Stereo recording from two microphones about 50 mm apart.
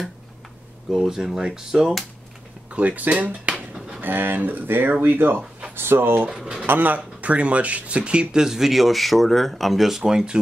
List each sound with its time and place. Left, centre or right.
0.9 s speech: centre
2.7 s speech: right
4.0 s speech: right
6.3 s speech: centre
6.6 s speech: right; by 10.4 s centre